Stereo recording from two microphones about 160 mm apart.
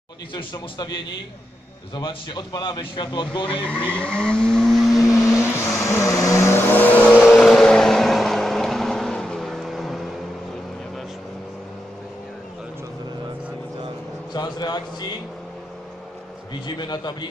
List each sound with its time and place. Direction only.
0.3 s speech: 30° left (ahead or behind)
3.9 s vehicle: 5° left (ahead or behind)
5.8 s vehicle: 20° left (ahead or behind)
7.2 s vehicle: centre (ahead or behind)
14.3 s a sound: 25° left (ahead or behind)
16.6 s speech: 25° left (ahead or behind)